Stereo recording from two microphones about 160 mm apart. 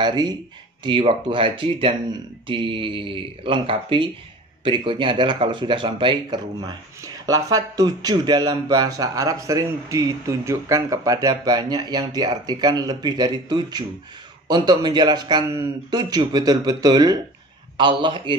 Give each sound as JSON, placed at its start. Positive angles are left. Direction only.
{"t": 0.0, "sound": "speech", "side_deg": -25}